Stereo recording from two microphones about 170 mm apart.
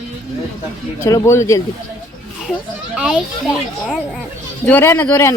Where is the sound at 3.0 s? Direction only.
5° right (ahead or behind).